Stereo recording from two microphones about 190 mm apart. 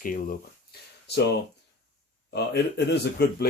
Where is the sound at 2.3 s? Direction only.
60° left (ahead or behind).